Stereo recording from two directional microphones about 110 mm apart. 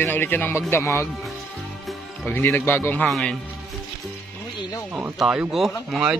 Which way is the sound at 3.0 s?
10° left (ahead or behind).